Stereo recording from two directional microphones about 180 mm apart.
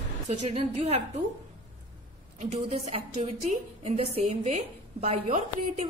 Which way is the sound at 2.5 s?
35° right (ahead or behind).